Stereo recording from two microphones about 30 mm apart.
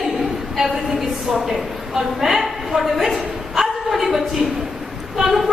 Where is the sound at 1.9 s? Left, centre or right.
Centre.